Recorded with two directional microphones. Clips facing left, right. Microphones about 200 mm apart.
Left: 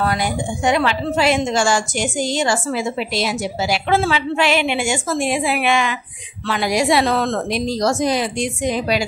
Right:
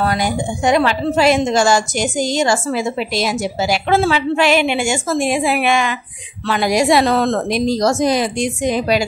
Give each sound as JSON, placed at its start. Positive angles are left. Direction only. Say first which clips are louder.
{"t": 0.7, "sound": "a woman's voice", "louder": "right 3 dB", "side_deg": -40}